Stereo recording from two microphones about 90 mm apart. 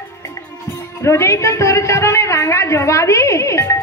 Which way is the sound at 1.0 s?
30° left (ahead or behind).